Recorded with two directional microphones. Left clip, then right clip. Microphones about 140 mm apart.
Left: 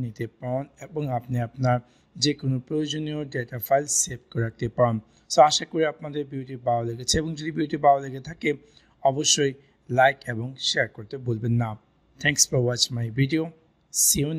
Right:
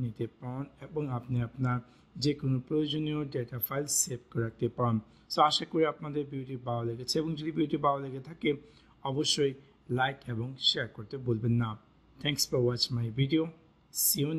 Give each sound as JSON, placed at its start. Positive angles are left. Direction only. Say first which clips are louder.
{"t": 0.0, "sound": "speech", "louder": "left 5 dB", "side_deg": 30}